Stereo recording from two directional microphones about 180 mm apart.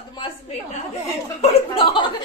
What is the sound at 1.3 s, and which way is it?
Speech, 35° left (ahead or behind).